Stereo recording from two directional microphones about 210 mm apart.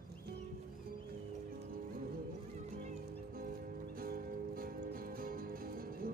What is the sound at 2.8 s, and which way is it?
Music, 45° right (ahead or behind).